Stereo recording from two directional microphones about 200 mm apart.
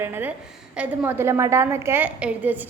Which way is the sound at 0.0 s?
10° right (ahead or behind).